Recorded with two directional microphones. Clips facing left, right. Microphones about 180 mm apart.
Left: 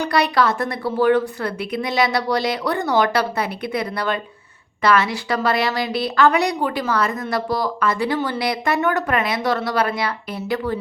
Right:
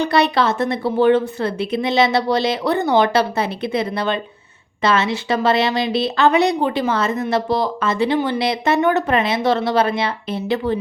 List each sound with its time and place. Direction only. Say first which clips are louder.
0.0 s a woman's voice: right 2 dB; 25° right (ahead or behind)